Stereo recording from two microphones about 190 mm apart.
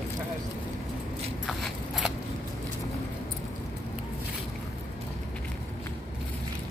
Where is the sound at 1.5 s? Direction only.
Centre (ahead or behind).